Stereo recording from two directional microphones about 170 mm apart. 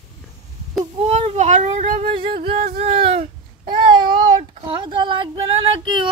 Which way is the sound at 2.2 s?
30° right (ahead or behind).